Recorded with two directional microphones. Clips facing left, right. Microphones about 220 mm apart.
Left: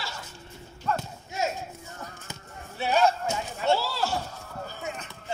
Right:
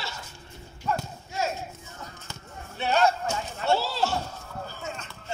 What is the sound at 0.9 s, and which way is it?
Livestock, 10° right (ahead or behind).